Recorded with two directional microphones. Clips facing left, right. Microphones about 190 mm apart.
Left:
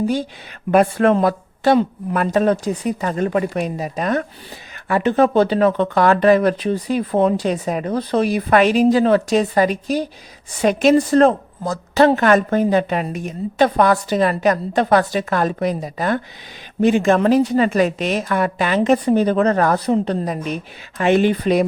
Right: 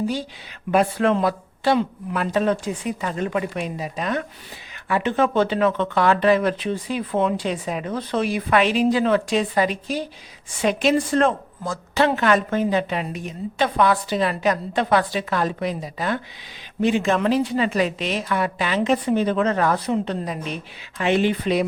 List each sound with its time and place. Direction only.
0.7 s a woman's voice: 50° left (ahead or behind)